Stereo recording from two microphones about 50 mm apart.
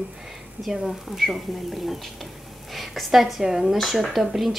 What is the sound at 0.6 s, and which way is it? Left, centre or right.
A woman's voice, centre.